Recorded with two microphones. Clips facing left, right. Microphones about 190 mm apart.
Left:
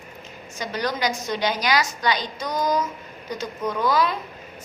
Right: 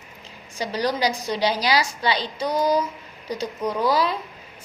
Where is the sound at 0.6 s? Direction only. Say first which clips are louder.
Right 3 dB; 35° right (ahead or behind).